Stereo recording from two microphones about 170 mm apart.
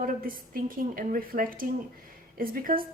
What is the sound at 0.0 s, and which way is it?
A woman's voice, 55° right (ahead or behind).